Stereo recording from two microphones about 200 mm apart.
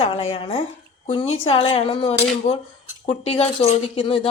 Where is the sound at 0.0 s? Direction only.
30° left (ahead or behind).